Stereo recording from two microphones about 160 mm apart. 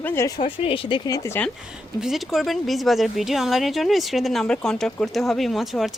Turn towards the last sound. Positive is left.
turn(degrees=0)  # may be behind; listen again after turning